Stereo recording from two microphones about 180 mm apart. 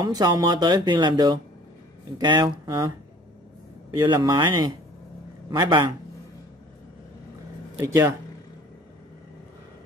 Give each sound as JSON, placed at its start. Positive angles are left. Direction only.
{"t": 0.0, "sound": "speech", "side_deg": -20}
{"t": 4.0, "sound": "speech", "side_deg": -25}
{"t": 7.8, "sound": "speech", "side_deg": -15}